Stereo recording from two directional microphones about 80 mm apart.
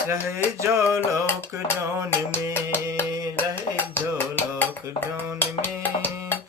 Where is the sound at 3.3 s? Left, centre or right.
Left.